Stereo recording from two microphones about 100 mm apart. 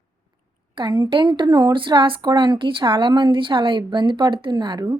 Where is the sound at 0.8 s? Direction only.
50° right (ahead or behind).